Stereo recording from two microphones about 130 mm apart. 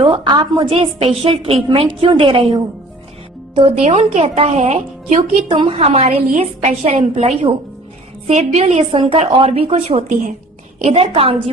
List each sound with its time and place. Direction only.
0.0 s a woman's voice: 40° right (ahead or behind); by 5.2 s 60° right (ahead or behind)
5.5 s a woman's voice: 40° right (ahead or behind)
8.3 s a woman's voice: 60° right (ahead or behind)
10.1 s a woman's voice: 80° right
10.8 s a woman's voice: 50° right (ahead or behind)